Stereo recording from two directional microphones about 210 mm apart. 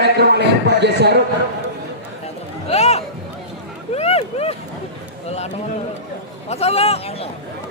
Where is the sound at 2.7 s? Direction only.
30° left (ahead or behind).